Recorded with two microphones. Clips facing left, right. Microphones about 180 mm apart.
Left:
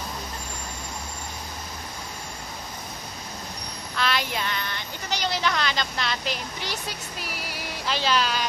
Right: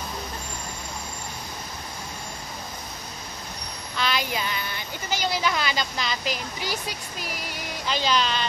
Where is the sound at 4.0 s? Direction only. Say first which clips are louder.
Even; centre (ahead or behind).